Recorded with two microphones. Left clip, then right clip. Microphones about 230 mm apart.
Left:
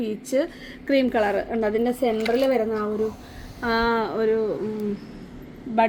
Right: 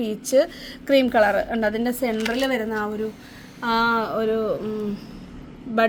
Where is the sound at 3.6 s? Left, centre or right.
Right.